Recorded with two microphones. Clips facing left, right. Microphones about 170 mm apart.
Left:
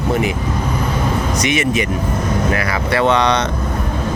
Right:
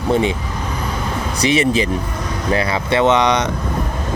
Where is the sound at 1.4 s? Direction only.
30° right (ahead or behind).